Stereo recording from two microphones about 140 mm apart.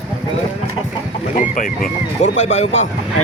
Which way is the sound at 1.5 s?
65° left (ahead or behind).